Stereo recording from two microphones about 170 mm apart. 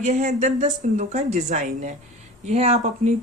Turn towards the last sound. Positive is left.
turn(degrees=-40)  # may be behind; listen again after turning